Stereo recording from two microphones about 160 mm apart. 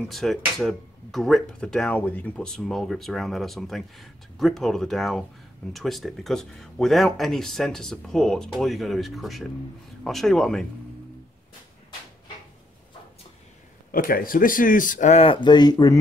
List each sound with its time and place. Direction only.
0.1 s speech: centre (ahead or behind)
13.9 s speech: 65° left (ahead or behind); by 16.0 s 25° left (ahead or behind)